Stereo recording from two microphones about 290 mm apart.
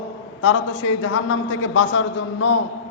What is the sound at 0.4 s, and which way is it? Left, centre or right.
A man's voice, left.